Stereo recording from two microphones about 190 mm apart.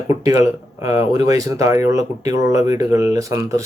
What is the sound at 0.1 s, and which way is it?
Speech, 15° right (ahead or behind).